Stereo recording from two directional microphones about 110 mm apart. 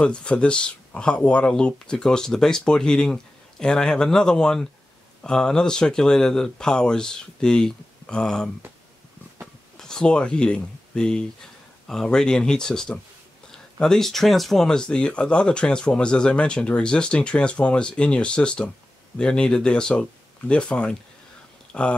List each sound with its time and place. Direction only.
0.0 s speech: 10° left (ahead or behind)
9.8 s speech: 5° left (ahead or behind)